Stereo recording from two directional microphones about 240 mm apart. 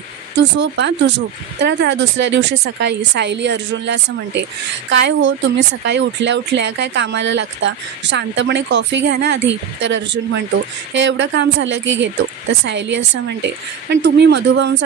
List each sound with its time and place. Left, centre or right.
0.4 s speech: right